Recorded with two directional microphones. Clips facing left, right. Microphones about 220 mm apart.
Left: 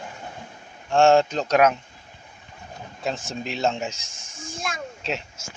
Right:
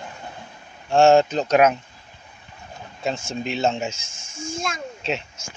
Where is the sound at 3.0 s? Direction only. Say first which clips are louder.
Right 3 dB; centre (ahead or behind).